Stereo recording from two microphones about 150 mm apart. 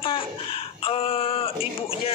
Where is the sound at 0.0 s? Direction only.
35° left (ahead or behind).